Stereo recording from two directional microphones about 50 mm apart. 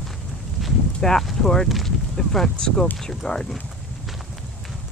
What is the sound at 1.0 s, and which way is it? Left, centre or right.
Speech, centre.